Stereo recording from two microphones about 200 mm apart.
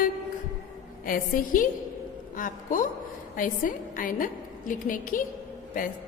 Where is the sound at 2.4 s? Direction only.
40° left (ahead or behind).